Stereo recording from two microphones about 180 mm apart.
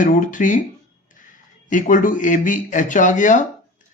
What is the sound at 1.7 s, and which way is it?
Speech, 45° left (ahead or behind).